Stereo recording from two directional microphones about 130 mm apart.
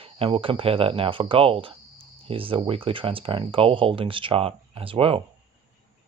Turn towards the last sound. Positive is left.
turn(degrees=-45)  # may be behind; listen again after turning